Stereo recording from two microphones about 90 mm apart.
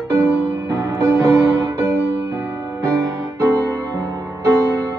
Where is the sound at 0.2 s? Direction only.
30° right (ahead or behind).